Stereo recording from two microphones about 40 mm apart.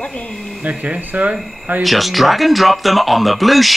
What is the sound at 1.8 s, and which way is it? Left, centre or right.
Speech, centre.